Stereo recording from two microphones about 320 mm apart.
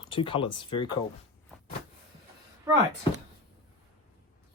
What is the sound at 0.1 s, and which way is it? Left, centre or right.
Speech, centre.